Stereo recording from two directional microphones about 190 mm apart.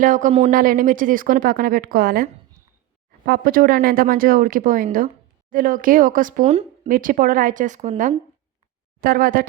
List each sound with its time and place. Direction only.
0.0 s speech: 45° right (ahead or behind)